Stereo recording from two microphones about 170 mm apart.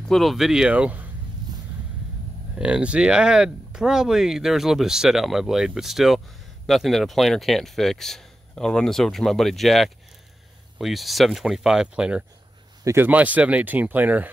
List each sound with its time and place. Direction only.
0.1 s speech: centre (ahead or behind)
2.6 s speech: 5° right (ahead or behind)